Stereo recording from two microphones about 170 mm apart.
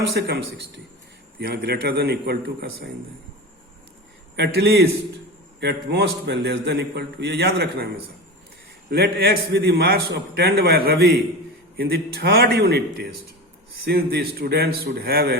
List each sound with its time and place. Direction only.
0.1 s a man's voice: 70° right (ahead or behind)
4.4 s a man's voice: 70° right (ahead or behind)
5.5 s a man's voice: 80° right; by 15.4 s 65° right (ahead or behind)